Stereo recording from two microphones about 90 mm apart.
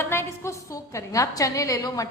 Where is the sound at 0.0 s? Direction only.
25° left (ahead or behind).